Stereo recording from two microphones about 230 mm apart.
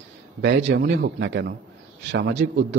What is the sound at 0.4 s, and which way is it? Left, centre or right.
Speech, right.